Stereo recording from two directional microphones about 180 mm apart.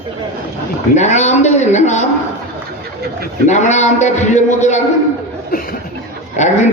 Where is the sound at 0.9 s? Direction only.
40° left (ahead or behind).